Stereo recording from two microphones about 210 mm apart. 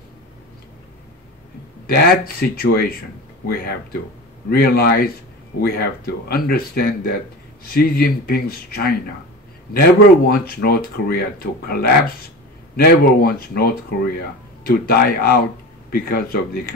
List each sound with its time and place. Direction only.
1.9 s speech: 45° left (ahead or behind)